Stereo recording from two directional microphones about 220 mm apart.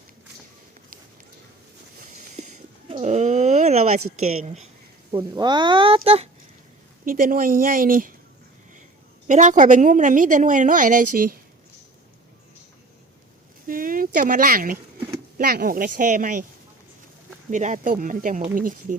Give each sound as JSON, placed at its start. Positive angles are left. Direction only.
{"t": 2.3, "sound": "a sound", "side_deg": -30}
{"t": 4.4, "sound": "a woman's voice", "side_deg": -30}
{"t": 5.1, "sound": "speech", "side_deg": -20}
{"t": 7.0, "sound": "a woman's voice", "side_deg": -40}
{"t": 9.2, "sound": "a woman's voice", "side_deg": -35}
{"t": 13.7, "sound": "a sound", "side_deg": -40}
{"t": 15.4, "sound": "a woman's voice", "side_deg": -40}
{"t": 17.5, "sound": "a woman's voice", "side_deg": -35}